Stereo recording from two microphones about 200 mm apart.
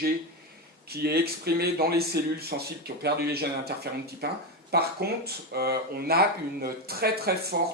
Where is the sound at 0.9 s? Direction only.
50° right (ahead or behind).